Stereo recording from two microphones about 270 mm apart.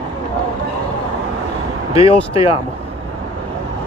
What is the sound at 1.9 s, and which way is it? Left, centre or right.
Speech, left.